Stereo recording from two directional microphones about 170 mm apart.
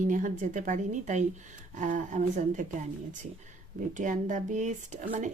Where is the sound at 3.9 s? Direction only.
50° right (ahead or behind).